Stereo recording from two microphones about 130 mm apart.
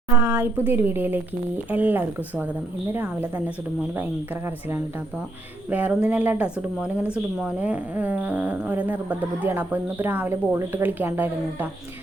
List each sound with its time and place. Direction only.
0.2 s a woman's voice: 15° right (ahead or behind)
5.7 s a woman's voice: 10° right (ahead or behind)